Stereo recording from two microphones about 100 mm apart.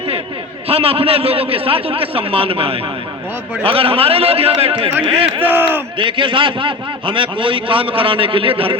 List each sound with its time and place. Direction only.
0.7 s a man's voice: 75° right (ahead or behind)
5.4 s speech: 20° right (ahead or behind)
6.0 s a man's voice: 55° right (ahead or behind)